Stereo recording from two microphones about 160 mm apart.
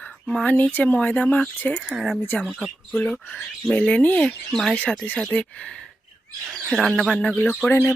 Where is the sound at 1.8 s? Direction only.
Centre (ahead or behind).